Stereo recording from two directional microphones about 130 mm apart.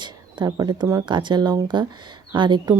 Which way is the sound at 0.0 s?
35° right (ahead or behind).